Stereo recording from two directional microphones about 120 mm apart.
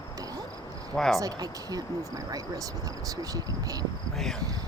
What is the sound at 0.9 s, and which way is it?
Speech, 5° left (ahead or behind).